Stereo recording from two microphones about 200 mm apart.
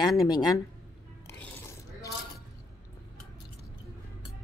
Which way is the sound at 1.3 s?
5° left (ahead or behind).